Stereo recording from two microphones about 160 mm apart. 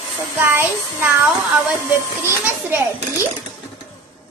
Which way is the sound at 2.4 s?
15° right (ahead or behind).